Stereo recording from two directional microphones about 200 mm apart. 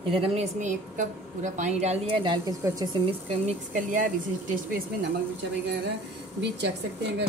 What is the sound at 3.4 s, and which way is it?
Speech, 40° right (ahead or behind).